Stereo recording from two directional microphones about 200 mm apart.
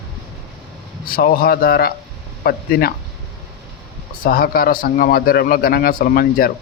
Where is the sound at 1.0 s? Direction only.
45° left (ahead or behind).